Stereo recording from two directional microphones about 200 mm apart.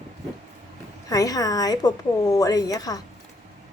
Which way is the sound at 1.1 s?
15° left (ahead or behind).